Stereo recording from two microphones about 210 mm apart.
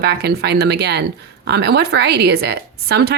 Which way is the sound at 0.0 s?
50° right (ahead or behind).